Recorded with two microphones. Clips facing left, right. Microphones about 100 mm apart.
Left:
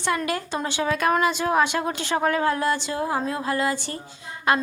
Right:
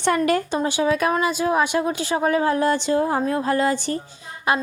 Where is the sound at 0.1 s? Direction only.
40° right (ahead or behind).